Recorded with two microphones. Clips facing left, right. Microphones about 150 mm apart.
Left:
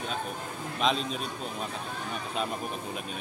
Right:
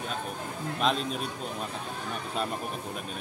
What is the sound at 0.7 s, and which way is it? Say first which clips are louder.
Speech: even; 5° right (ahead or behind).